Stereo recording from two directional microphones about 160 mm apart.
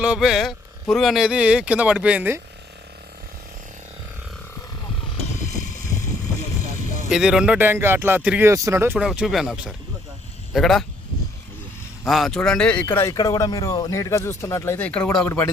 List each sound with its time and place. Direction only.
0.0 s a man's voice: 5° right (ahead or behind)
7.1 s a man's voice: 5° right (ahead or behind)
9.0 s speech: centre (ahead or behind)
12.0 s speech: centre (ahead or behind)